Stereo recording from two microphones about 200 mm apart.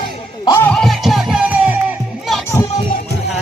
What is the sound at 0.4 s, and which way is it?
Music, 10° left (ahead or behind).